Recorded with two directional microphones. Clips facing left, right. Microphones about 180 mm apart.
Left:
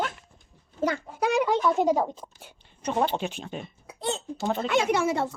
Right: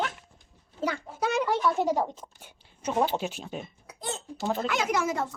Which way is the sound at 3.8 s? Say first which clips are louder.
Left 5 dB; 25° left (ahead or behind).